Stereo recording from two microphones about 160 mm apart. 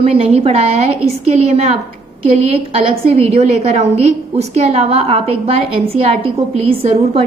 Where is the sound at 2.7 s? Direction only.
40° right (ahead or behind).